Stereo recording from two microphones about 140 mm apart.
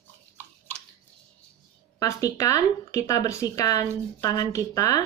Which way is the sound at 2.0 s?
25° left (ahead or behind).